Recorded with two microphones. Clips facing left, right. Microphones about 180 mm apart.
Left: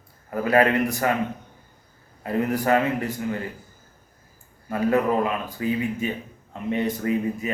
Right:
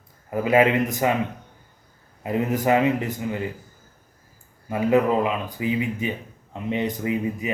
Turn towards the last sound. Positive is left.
turn(degrees=-15)  # may be behind; listen again after turning